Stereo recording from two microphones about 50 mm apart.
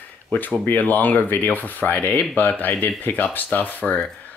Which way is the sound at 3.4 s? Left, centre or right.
Left.